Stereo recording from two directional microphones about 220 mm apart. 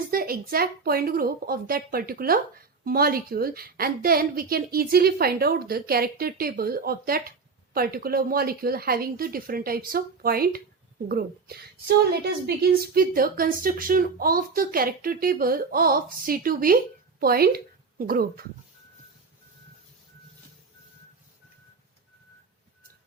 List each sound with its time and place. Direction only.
0.1 s a woman's voice: 40° right (ahead or behind)